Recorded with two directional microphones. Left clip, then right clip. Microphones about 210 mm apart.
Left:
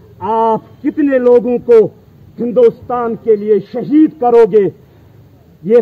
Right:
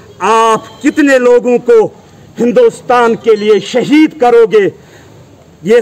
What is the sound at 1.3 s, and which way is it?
A man's voice, 55° right (ahead or behind).